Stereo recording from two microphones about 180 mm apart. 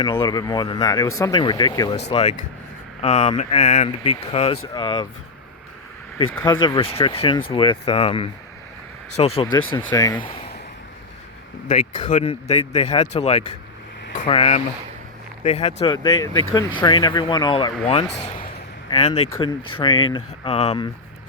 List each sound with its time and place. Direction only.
0.0 s speech: 25° left (ahead or behind)
2.0 s speech: 40° left (ahead or behind)
6.4 s speech: 25° left (ahead or behind)
11.7 s speech: 45° left (ahead or behind)